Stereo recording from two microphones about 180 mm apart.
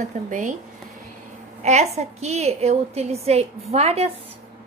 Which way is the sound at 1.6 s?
40° right (ahead or behind).